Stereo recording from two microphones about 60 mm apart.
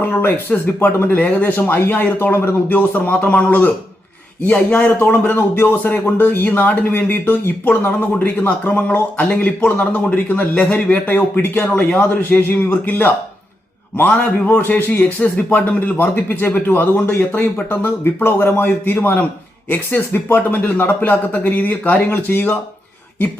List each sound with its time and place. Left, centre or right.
0.0 s speech: left
2.3 s speech: left
2.6 s speech: left
5.4 s speech: left
9.3 s speech: centre
14.6 s speech: left